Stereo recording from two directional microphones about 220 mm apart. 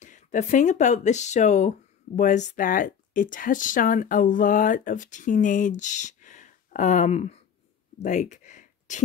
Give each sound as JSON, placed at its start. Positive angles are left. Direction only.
{"t": 0.0, "sound": "speech", "side_deg": 35}